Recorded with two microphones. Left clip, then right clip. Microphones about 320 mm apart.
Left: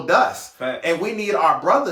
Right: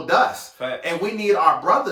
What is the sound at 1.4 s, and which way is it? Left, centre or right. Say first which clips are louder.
Speech: left 1 dB; centre.